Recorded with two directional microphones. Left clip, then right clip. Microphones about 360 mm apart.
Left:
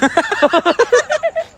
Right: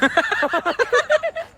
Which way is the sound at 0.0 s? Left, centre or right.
Centre.